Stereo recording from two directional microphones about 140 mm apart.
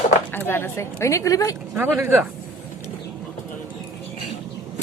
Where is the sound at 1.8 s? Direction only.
15° right (ahead or behind).